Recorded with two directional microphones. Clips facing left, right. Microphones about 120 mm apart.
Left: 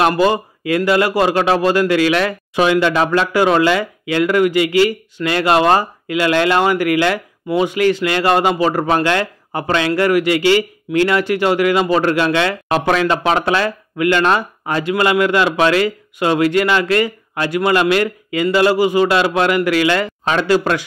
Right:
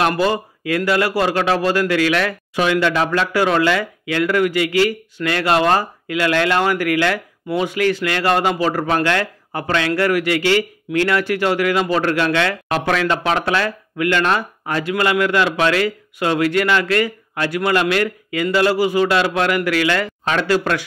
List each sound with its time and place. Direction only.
0.2 s speech: 20° left (ahead or behind)